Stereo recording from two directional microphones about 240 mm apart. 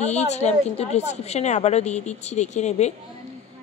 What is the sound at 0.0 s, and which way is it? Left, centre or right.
A woman's voice, left.